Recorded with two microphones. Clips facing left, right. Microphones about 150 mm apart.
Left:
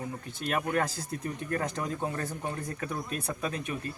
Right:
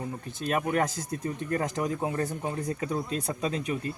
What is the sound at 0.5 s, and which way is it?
Speech, 20° right (ahead or behind).